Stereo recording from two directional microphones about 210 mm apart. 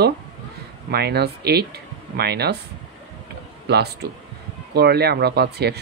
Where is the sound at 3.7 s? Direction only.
50° right (ahead or behind).